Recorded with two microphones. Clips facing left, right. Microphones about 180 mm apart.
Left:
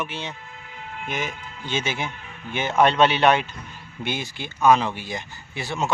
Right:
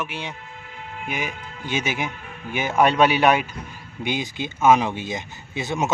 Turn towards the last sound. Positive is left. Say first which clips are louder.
# right 3 dB
turn(degrees=-20)  # may be behind; listen again after turning